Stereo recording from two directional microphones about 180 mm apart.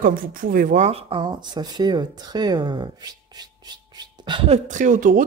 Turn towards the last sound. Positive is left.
turn(degrees=-45)  # may be behind; listen again after turning